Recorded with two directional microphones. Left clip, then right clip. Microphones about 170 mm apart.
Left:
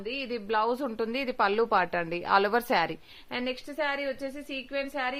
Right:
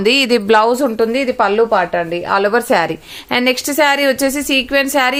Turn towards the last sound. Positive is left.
turn(degrees=-25)  # may be behind; listen again after turning